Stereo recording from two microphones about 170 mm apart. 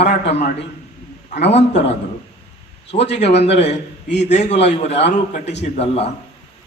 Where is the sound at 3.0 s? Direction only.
90° left.